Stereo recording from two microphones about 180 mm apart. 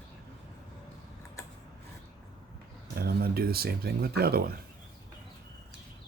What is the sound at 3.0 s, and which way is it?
Speech, 60° right (ahead or behind).